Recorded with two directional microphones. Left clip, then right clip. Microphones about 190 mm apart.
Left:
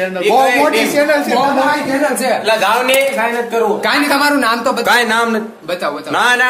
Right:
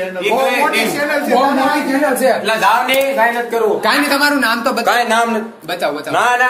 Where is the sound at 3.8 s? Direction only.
10° left (ahead or behind).